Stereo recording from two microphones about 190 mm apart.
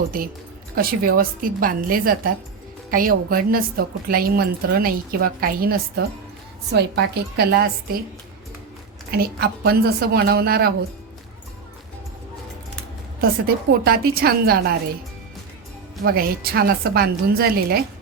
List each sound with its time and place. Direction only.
0.1 s a woman's voice: 45° right (ahead or behind)
9.1 s a woman's voice: 50° right (ahead or behind)
13.7 s a woman's voice: 55° right (ahead or behind)
16.0 s a woman's voice: 50° right (ahead or behind)